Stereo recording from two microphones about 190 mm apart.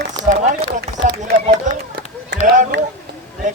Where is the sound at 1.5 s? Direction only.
55° right (ahead or behind).